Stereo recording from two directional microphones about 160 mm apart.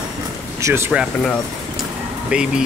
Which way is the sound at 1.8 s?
5° right (ahead or behind).